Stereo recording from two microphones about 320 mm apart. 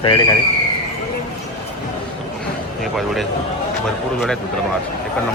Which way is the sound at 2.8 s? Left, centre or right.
Centre.